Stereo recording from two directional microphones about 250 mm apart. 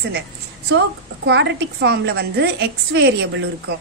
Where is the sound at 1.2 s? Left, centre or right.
Right.